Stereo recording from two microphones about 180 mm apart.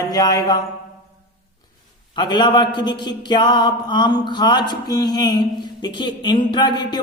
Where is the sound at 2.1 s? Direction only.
25° left (ahead or behind).